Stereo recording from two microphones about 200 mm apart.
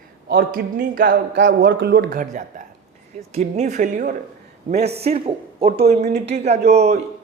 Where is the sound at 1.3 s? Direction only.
65° right (ahead or behind); by 5.7 s 30° right (ahead or behind).